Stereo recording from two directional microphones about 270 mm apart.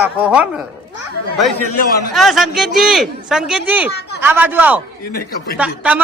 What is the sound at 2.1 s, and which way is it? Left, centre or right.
Speech, centre.